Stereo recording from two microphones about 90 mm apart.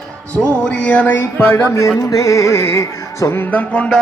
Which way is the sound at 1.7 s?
40° left (ahead or behind).